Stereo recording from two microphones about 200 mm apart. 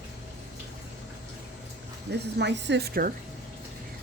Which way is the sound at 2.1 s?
60° right (ahead or behind).